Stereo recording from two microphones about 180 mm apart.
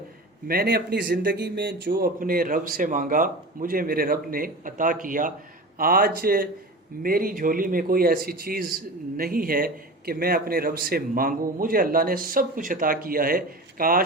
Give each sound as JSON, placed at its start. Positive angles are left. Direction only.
{"t": 0.4, "sound": "speech", "side_deg": -60}
{"t": 1.9, "sound": "a man's voice", "side_deg": -55}